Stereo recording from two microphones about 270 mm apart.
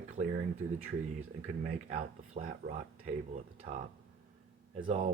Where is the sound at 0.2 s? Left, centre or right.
Right.